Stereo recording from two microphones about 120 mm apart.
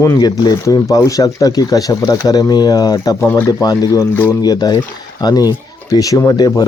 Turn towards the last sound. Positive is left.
turn(degrees=35)  # may be behind; listen again after turning